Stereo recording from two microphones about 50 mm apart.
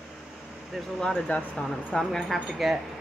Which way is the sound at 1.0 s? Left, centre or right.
Centre.